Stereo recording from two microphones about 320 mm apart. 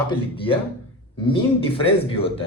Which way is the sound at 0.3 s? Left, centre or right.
Centre.